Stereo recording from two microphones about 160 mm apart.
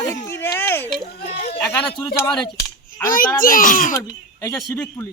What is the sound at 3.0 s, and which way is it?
Speech, 60° left (ahead or behind).